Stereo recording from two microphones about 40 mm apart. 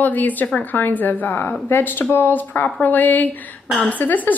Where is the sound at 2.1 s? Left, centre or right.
Left.